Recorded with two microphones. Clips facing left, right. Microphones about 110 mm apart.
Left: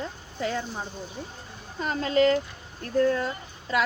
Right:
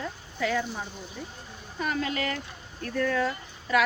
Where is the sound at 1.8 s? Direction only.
30° left (ahead or behind).